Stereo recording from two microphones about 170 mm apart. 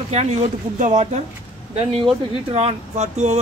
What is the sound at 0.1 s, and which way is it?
Speech, 40° right (ahead or behind).